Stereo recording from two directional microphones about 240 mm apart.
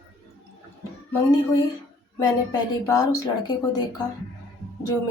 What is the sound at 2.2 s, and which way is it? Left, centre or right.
Speech, centre.